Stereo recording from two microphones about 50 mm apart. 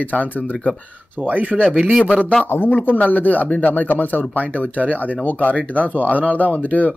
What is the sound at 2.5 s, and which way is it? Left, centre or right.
Speech, left.